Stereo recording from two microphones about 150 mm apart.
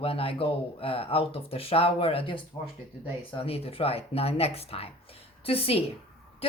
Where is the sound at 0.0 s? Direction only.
40° left (ahead or behind).